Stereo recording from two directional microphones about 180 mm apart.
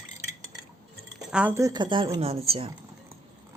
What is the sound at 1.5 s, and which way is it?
A woman's voice, 20° right (ahead or behind).